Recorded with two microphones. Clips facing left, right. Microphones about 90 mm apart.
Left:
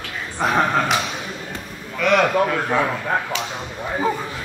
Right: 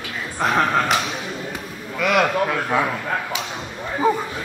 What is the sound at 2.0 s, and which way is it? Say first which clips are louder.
Speech: left 2 dB; 5° right (ahead or behind).